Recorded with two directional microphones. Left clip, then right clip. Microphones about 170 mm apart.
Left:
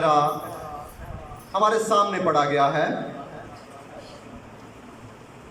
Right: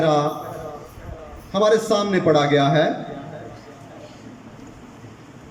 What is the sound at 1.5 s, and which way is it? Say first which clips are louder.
A man's voice: right 2 dB; 30° right (ahead or behind).